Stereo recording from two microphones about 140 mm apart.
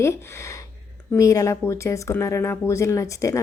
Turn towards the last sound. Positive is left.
turn(degrees=20)  # may be behind; listen again after turning